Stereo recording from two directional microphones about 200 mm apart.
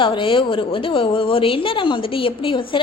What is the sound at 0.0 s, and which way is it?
A woman's voice, 25° left (ahead or behind).